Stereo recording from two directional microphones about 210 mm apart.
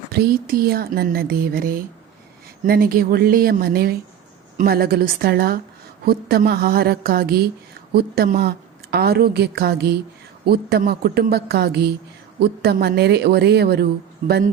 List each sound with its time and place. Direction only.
0.1 s a woman's voice: 45° right (ahead or behind)